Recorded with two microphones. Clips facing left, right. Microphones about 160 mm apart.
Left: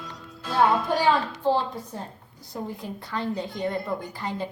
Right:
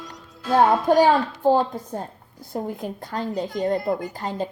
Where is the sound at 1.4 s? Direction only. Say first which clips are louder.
Right 6 dB; 45° right (ahead or behind).